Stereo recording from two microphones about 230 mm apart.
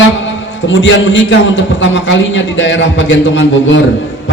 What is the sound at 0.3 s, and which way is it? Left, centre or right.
A man's voice, left.